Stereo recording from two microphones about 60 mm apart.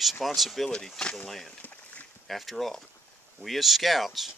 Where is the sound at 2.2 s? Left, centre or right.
Centre.